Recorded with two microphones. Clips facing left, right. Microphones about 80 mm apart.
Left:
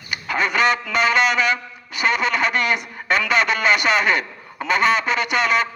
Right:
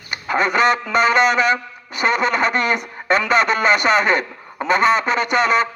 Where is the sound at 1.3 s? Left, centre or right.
Right.